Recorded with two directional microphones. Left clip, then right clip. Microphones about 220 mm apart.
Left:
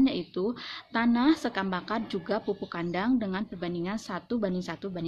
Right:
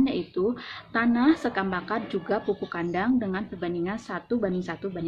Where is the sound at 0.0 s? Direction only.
45° left (ahead or behind).